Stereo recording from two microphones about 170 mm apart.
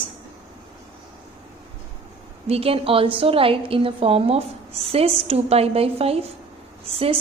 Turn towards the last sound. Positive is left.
turn(degrees=-35)  # may be behind; listen again after turning